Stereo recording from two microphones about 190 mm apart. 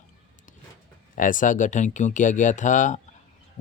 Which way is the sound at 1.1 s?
45° left (ahead or behind).